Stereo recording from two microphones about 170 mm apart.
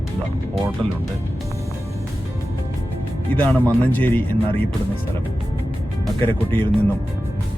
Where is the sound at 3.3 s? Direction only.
10° left (ahead or behind).